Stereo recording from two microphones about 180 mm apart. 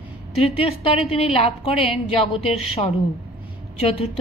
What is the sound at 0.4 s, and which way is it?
A woman's voice, 30° left (ahead or behind).